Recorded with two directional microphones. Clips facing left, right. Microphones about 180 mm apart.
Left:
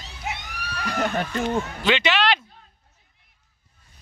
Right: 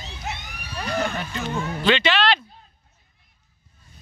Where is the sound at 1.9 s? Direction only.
15° left (ahead or behind).